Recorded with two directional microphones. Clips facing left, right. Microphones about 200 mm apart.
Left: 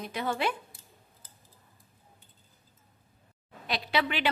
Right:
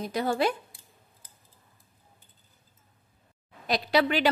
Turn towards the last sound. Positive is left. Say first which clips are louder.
# right 6 dB
turn(degrees=-40)  # may be behind; listen again after turning